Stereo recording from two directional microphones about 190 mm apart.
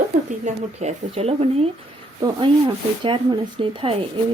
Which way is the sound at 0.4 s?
35° right (ahead or behind).